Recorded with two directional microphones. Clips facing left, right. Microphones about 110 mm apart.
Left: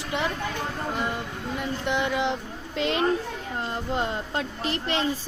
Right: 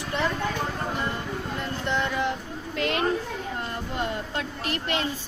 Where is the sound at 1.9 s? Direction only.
15° left (ahead or behind).